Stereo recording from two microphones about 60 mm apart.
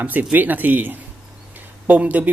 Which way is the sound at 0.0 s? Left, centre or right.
Right.